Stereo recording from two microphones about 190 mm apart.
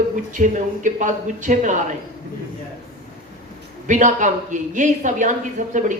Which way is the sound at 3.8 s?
40° right (ahead or behind).